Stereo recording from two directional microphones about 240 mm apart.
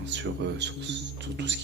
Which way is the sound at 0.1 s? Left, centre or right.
Right.